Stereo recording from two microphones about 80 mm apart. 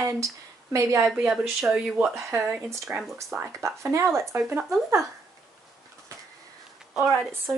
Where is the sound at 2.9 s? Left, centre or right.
Centre.